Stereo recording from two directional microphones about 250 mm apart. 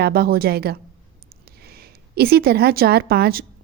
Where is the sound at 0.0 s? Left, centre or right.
Right.